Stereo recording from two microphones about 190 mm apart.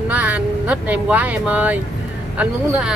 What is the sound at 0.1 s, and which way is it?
Speech, 10° right (ahead or behind).